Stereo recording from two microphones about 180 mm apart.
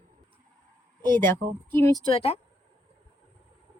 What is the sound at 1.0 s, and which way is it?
Speech, 10° left (ahead or behind).